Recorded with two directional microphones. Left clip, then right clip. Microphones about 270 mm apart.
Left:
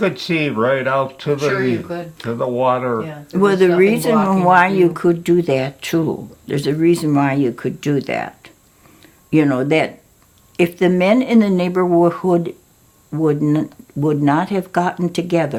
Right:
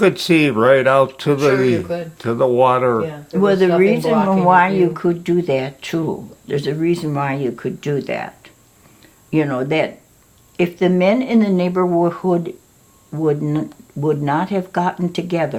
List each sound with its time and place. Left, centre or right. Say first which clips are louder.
0.0 s speech: right 5 dB; right
3.2 s speech: left 2 dB; left